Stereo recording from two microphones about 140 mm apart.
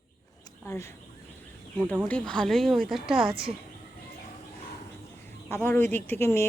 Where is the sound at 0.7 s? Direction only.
20° left (ahead or behind).